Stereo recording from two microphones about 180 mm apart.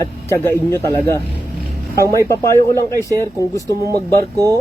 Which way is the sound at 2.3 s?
15° left (ahead or behind).